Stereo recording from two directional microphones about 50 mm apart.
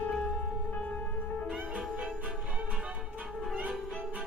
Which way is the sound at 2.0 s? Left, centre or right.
Right.